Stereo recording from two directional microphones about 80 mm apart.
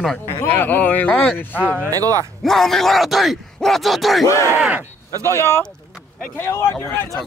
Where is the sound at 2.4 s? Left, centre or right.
Centre.